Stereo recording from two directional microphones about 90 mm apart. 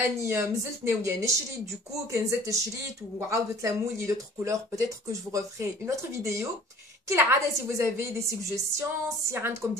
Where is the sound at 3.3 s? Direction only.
35° right (ahead or behind).